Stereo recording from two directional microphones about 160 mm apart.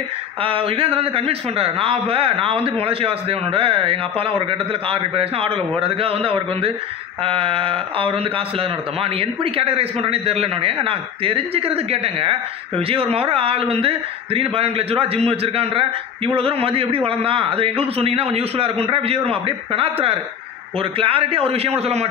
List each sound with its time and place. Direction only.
0.4 s a man's voice: 35° right (ahead or behind)